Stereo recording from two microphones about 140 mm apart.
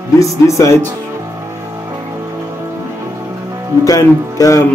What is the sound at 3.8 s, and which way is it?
Speech, 25° left (ahead or behind).